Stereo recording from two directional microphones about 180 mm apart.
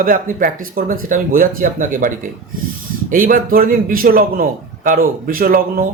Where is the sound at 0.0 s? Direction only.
50° right (ahead or behind).